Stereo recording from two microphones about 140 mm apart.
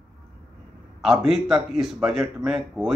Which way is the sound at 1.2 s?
Centre (ahead or behind).